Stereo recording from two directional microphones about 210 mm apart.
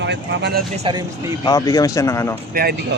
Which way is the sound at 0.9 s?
25° right (ahead or behind).